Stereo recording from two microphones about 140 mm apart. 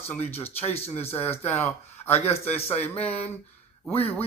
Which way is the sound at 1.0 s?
45° left (ahead or behind).